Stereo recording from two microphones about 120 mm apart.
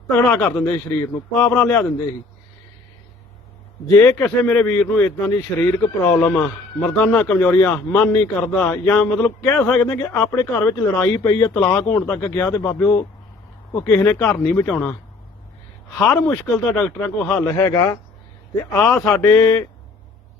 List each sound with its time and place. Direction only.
0.3 s a man's voice: 20° left (ahead or behind)
3.8 s a man's voice: 20° left (ahead or behind)
16.0 s a man's voice: 15° left (ahead or behind)
17.2 s speech: 25° left (ahead or behind)
18.9 s a man's voice: 20° left (ahead or behind)